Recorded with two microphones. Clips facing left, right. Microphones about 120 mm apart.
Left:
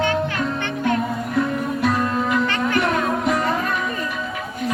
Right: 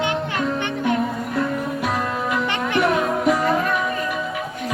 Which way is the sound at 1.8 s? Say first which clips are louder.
Left 3 dB; 10° right (ahead or behind).